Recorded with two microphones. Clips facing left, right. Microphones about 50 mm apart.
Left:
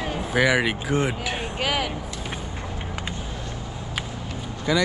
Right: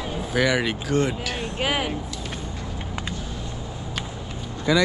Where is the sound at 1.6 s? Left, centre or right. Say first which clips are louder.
Right 1 dB; right.